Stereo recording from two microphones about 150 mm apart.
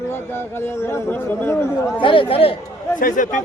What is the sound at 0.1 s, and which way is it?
A man's voice, 15° left (ahead or behind).